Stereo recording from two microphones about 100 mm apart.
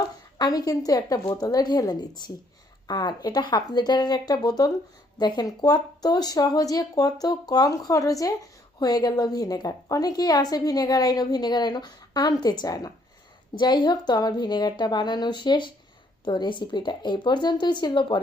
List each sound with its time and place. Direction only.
0.3 s a woman's voice: 40° left (ahead or behind)